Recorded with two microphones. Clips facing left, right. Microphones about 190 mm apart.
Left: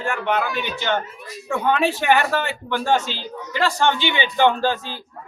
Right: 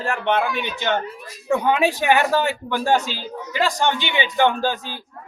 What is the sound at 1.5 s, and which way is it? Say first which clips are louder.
Speech: right 2 dB; 10° right (ahead or behind).